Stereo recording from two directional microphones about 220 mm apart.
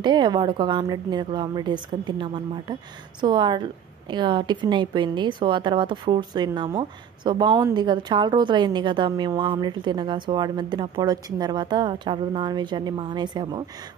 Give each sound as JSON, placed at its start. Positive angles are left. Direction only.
{"t": 0.0, "sound": "a woman's voice", "side_deg": -20}